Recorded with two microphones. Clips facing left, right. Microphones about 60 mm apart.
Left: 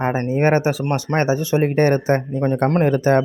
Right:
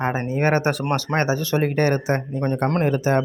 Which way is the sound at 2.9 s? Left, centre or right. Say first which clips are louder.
Left 4 dB; left.